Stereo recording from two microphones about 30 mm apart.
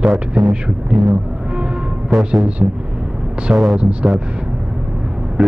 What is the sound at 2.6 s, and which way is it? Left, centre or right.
Speech, right.